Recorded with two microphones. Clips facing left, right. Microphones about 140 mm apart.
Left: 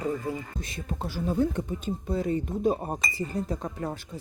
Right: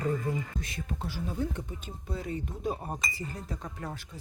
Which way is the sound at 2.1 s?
35° left (ahead or behind).